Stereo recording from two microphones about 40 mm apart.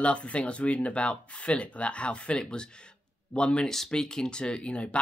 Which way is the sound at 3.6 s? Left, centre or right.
Centre.